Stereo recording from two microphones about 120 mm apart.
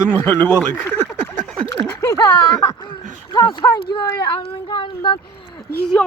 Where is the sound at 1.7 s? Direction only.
25° left (ahead or behind).